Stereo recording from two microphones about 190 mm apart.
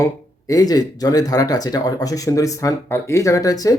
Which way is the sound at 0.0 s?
20° left (ahead or behind).